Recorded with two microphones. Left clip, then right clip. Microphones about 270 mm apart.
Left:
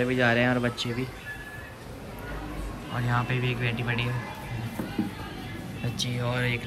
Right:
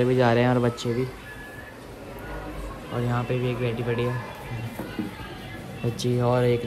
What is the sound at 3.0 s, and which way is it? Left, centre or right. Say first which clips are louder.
Speech: even; centre.